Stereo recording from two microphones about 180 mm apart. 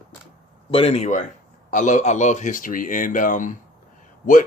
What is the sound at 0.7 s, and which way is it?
Speech, 35° left (ahead or behind).